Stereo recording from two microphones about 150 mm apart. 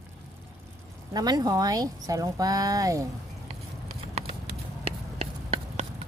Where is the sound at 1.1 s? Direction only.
25° right (ahead or behind).